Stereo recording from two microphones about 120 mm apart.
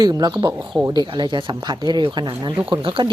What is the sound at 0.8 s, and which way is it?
A woman's voice, 40° right (ahead or behind).